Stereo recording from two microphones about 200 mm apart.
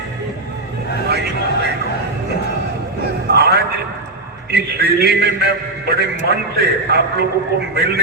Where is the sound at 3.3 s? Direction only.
55° right (ahead or behind).